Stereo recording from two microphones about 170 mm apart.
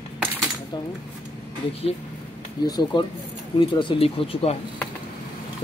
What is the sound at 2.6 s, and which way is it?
Speech, 25° left (ahead or behind).